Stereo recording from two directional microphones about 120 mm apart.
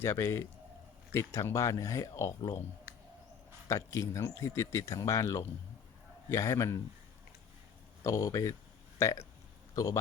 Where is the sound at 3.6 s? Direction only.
25° left (ahead or behind).